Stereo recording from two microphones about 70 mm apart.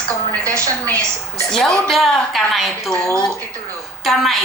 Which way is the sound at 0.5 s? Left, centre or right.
Right.